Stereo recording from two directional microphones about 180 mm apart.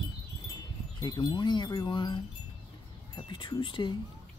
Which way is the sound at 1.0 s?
25° left (ahead or behind).